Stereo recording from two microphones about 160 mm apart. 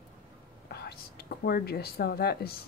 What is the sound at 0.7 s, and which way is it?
Speech, 80° left.